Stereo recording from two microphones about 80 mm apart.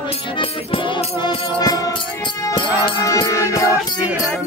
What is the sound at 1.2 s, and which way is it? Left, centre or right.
Music, left.